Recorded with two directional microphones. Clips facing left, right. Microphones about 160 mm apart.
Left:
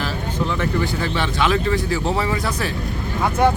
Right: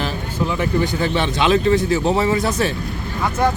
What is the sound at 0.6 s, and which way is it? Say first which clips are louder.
Speech: right 3 dB; 20° right (ahead or behind).